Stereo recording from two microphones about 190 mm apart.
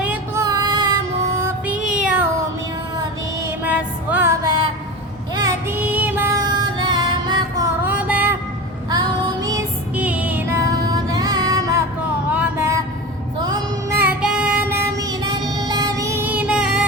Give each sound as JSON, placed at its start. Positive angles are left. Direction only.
{"t": 0.0, "sound": "music", "side_deg": -10}
{"t": 0.4, "sound": "female singing", "side_deg": -20}
{"t": 1.6, "sound": "meow", "side_deg": -5}
{"t": 3.6, "sound": "music", "side_deg": -10}
{"t": 7.9, "sound": "music", "side_deg": -5}
{"t": 8.9, "sound": "music", "side_deg": -20}
{"t": 9.9, "sound": "music", "side_deg": -5}
{"t": 13.4, "sound": "child singing", "side_deg": -20}
{"t": 14.0, "sound": "child singing", "side_deg": -5}